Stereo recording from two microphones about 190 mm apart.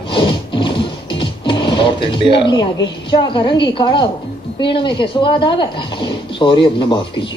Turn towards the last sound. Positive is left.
turn(degrees=25)  # may be behind; listen again after turning